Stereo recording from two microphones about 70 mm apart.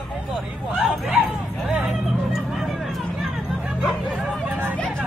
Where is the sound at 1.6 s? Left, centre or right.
Centre.